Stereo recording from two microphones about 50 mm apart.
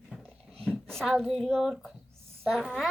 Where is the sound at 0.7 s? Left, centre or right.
Centre.